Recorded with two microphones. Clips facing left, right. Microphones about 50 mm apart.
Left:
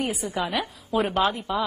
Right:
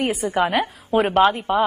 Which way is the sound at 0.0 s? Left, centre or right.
Right.